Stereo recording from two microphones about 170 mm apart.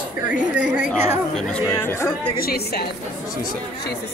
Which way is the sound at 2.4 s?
65° left (ahead or behind).